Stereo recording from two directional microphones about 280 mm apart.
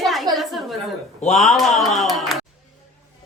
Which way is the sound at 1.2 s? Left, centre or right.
Left.